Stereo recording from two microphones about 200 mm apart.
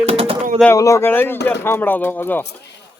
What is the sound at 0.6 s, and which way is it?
A man's voice, 15° left (ahead or behind).